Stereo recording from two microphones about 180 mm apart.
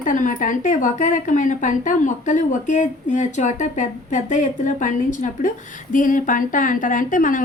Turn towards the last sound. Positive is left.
turn(degrees=45)  # may be behind; listen again after turning